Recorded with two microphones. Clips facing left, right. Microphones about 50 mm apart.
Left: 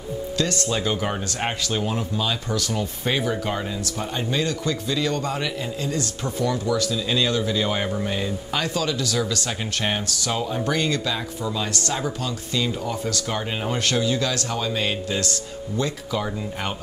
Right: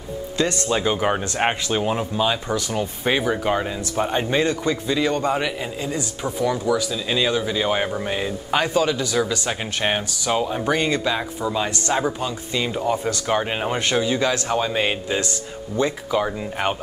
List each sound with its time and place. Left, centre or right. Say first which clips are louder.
0.4 s a man's voice: right 4 dB; right
3.9 s a man's voice: right 7 dB; right